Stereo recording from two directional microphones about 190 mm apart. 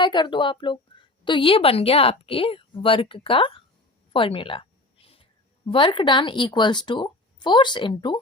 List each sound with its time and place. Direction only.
0.0 s a woman's voice: 25° left (ahead or behind)
5.0 s a sound: 30° left (ahead or behind)
5.7 s a woman's voice: 25° left (ahead or behind)